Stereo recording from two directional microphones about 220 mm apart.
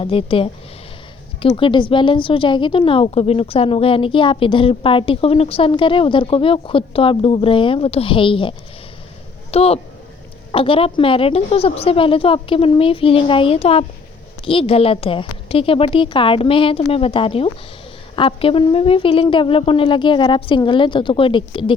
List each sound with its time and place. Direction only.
0.0 s a woman's voice: 25° left (ahead or behind)